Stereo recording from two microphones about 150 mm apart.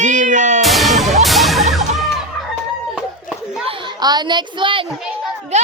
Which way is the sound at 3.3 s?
60° left (ahead or behind).